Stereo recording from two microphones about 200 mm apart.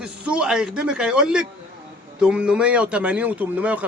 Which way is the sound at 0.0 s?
5° right (ahead or behind).